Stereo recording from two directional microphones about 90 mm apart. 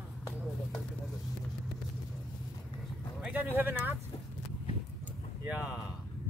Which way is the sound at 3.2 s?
10° right (ahead or behind).